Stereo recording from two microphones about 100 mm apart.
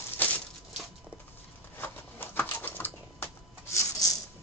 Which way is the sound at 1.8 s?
20° left (ahead or behind).